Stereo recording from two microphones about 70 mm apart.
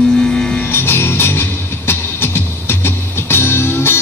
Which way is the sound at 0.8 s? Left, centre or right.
Left.